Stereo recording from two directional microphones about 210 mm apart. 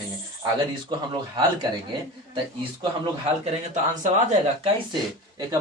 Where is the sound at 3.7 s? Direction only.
35° right (ahead or behind).